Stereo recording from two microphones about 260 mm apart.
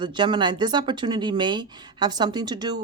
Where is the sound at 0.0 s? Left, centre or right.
Centre.